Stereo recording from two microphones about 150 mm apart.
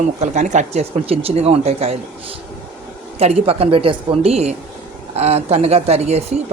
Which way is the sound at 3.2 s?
45° right (ahead or behind).